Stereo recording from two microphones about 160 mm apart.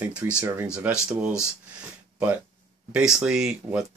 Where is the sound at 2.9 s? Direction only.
5° right (ahead or behind).